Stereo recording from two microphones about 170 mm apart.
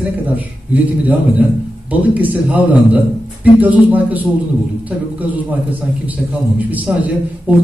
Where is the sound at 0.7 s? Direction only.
10° right (ahead or behind).